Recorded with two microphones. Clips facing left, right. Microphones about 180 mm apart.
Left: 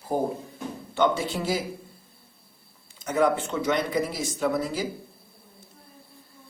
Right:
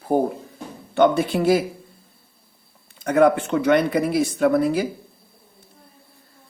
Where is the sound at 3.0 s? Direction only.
60° right (ahead or behind).